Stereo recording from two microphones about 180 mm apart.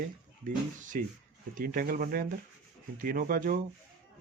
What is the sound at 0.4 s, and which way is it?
A man's voice, 50° right (ahead or behind).